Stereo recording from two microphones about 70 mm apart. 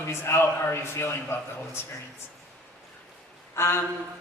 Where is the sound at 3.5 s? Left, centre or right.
Left.